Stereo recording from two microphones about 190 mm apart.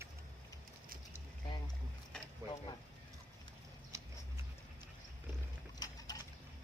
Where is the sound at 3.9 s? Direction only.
15° right (ahead or behind).